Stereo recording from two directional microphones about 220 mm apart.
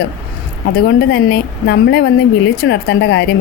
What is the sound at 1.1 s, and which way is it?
A woman's voice, 50° left (ahead or behind).